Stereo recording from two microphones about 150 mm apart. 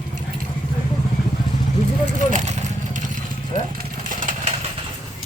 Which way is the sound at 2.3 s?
55° right (ahead or behind).